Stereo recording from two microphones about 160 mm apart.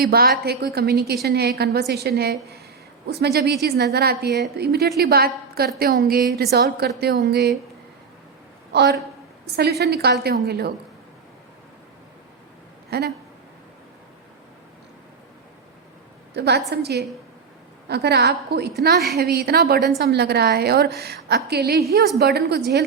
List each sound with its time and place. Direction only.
0.1 s a woman's voice: 75° right (ahead or behind)
6.3 s a woman's voice: 85° right
8.7 s a woman's voice: 90° right
12.9 s speech: 90° right
16.3 s a woman's voice: 90° right
20.0 s a woman's voice: 90° right